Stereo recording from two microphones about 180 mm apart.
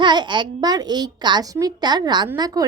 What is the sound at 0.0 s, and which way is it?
A child's voice, 25° right (ahead or behind).